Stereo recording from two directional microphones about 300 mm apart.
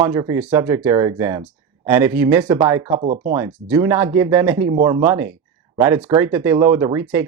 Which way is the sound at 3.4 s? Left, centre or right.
Centre.